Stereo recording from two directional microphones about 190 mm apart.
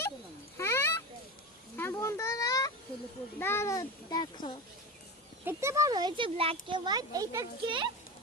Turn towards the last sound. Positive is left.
turn(degrees=-25)  # may be behind; listen again after turning